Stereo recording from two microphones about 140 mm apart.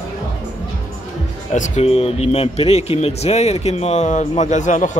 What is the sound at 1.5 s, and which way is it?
Speech, 55° left (ahead or behind).